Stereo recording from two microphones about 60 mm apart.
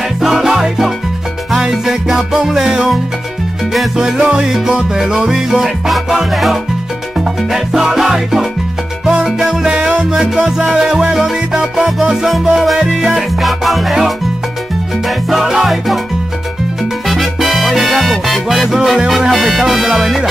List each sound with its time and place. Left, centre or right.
0.2 s music: centre
4.0 s music: centre
9.7 s music: right; by 16.0 s centre
17.1 s music: centre